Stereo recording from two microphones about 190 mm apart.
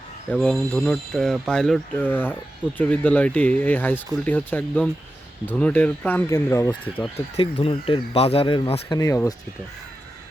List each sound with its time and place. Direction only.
0.4 s speech: 5° left (ahead or behind)
7.3 s speech: 30° left (ahead or behind)